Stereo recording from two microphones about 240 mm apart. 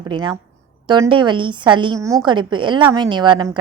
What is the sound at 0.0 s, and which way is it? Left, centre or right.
A woman's voice, centre.